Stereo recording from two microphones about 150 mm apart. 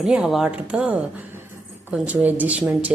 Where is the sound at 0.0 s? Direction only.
5° right (ahead or behind).